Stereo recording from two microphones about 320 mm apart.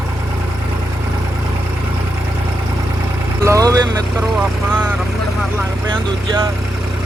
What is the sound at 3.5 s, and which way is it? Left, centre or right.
Vehicle, centre.